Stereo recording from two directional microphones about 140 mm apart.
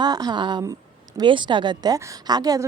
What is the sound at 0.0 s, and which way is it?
A woman's voice, 30° right (ahead or behind).